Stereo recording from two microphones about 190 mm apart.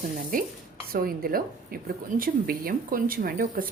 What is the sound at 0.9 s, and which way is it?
A woman's voice, 50° right (ahead or behind).